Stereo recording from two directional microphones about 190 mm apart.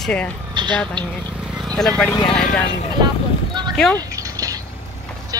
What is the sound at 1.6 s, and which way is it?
Speech, centre (ahead or behind).